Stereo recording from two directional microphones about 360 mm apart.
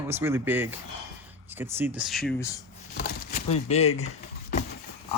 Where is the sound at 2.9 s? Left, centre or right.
Left.